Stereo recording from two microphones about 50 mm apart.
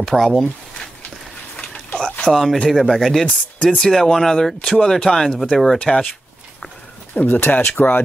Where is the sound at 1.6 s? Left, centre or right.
Left.